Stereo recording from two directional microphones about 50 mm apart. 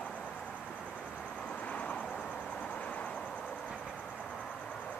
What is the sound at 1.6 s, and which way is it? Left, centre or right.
Vehicle, left.